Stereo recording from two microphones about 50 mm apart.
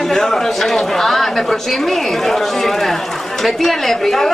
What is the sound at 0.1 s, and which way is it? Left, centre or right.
Speech, centre.